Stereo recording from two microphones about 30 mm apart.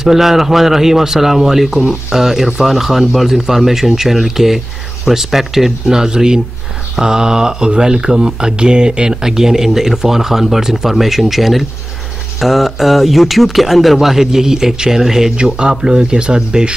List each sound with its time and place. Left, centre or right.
0.0 s speech: centre
6.0 s speech: right
9.2 s speech: centre
13.9 s speech: centre
15.3 s speech: right